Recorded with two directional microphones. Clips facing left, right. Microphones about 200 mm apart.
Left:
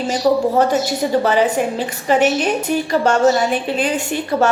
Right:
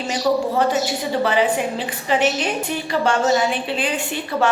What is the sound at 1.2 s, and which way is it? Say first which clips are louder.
Speech: left 1 dB; 40° left (ahead or behind).